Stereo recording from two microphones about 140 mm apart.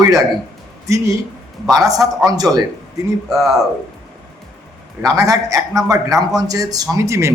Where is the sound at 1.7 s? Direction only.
25° right (ahead or behind).